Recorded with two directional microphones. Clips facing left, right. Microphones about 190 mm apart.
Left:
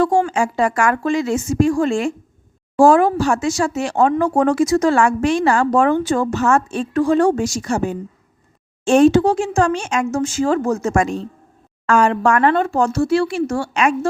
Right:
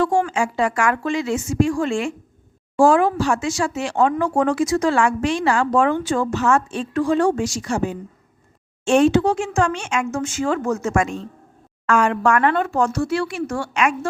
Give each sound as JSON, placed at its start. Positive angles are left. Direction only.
{"t": 0.3, "sound": "speech", "side_deg": 40}